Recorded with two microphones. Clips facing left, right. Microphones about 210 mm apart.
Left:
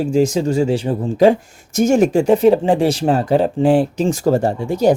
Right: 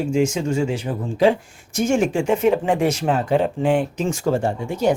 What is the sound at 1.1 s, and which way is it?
Speech, 45° left (ahead or behind).